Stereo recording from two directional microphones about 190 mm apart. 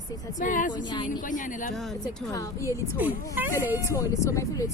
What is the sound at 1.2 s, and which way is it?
Speech, 45° left (ahead or behind).